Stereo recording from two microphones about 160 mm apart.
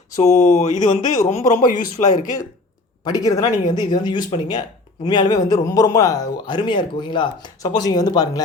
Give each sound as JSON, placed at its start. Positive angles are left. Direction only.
{"t": 0.2, "sound": "speech", "side_deg": 45}
{"t": 3.0, "sound": "a man's voice", "side_deg": 25}